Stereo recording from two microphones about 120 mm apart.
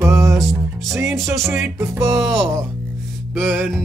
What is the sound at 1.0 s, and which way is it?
Speech, centre (ahead or behind).